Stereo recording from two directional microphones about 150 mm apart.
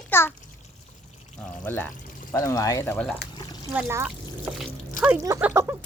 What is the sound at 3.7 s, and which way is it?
Speech, 15° right (ahead or behind).